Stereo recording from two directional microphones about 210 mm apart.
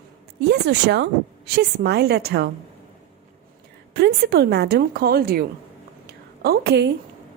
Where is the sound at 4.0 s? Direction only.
50° right (ahead or behind).